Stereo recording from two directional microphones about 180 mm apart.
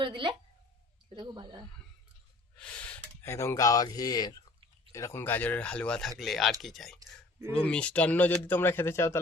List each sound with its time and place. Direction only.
0.0 s a woman's voice: 25° right (ahead or behind)
2.6 s speech: 5° left (ahead or behind)